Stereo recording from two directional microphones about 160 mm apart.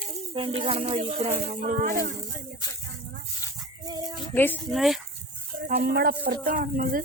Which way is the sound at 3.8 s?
25° right (ahead or behind).